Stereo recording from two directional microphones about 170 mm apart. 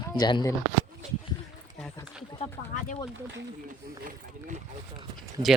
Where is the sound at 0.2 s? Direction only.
25° left (ahead or behind).